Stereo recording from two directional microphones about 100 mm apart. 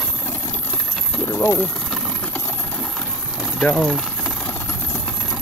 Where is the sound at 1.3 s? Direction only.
30° left (ahead or behind).